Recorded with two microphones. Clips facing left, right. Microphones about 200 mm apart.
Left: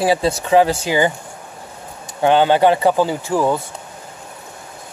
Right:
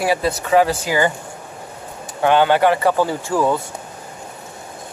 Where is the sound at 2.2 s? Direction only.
25° left (ahead or behind).